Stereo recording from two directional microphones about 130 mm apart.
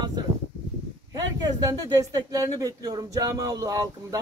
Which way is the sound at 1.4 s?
25° right (ahead or behind).